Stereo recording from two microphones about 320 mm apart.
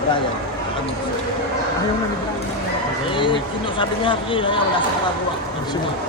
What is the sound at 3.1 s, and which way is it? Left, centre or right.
Speech, centre.